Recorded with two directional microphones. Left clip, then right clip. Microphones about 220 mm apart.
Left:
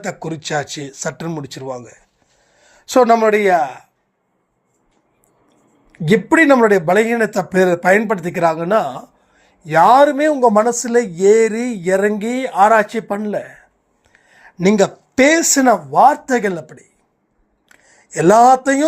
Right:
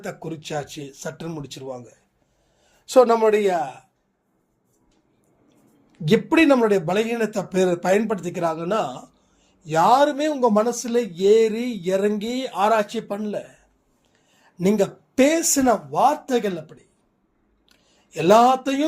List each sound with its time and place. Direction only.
0.0 s speech: 15° left (ahead or behind)
5.9 s speech: 20° left (ahead or behind); by 16.8 s 35° left (ahead or behind)
18.1 s speech: 35° left (ahead or behind)